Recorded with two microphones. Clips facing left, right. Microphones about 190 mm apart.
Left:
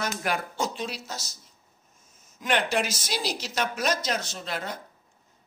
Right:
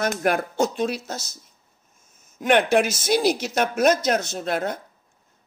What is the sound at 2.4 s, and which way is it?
Speech, 55° right (ahead or behind).